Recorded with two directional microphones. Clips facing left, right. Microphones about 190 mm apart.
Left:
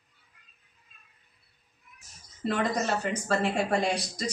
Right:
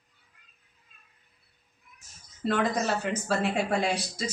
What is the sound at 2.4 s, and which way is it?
Speech, centre (ahead or behind).